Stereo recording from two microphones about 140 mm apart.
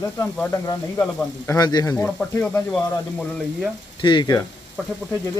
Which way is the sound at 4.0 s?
35° left (ahead or behind).